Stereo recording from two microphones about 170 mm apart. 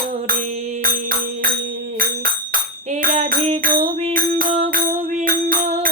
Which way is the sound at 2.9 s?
50° right (ahead or behind).